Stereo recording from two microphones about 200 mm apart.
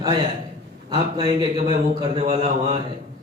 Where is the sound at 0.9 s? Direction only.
20° right (ahead or behind).